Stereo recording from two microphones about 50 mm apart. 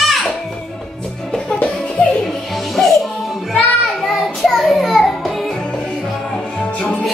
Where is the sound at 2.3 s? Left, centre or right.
Centre.